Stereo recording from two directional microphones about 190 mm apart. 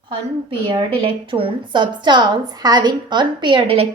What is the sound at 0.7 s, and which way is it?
A woman's voice, 30° right (ahead or behind).